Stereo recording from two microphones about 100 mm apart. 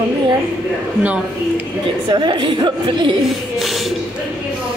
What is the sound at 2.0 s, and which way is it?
A woman's voice, 50° right (ahead or behind).